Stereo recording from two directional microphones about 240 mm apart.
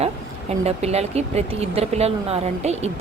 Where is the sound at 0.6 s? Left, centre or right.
Right.